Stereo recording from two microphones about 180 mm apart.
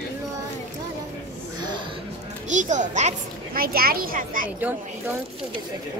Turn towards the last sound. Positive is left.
turn(degrees=-50)  # may be behind; listen again after turning